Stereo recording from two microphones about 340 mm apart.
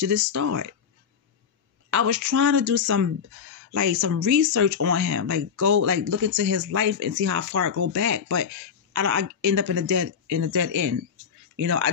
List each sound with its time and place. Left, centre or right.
0.0 s speech: right
1.9 s speech: right